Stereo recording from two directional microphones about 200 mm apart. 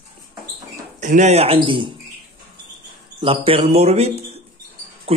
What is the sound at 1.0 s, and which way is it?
Speech, 35° right (ahead or behind).